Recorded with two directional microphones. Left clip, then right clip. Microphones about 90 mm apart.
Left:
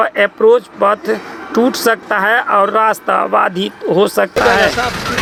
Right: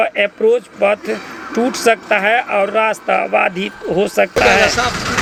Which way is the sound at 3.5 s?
30° left (ahead or behind).